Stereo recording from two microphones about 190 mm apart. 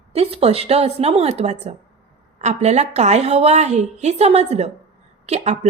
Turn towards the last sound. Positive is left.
turn(degrees=-35)  # may be behind; listen again after turning